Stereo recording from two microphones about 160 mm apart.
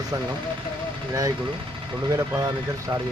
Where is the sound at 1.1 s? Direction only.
20° right (ahead or behind).